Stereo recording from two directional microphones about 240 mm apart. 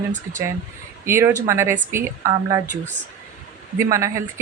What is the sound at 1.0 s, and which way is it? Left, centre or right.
Speech, centre.